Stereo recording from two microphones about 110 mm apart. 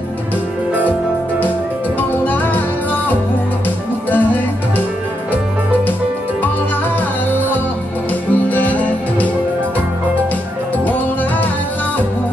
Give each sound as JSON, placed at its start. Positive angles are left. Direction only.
{"t": 2.0, "sound": "music", "side_deg": 15}
{"t": 7.3, "sound": "music", "side_deg": 15}